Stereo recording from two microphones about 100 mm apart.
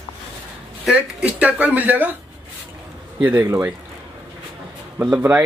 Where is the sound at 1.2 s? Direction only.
15° right (ahead or behind).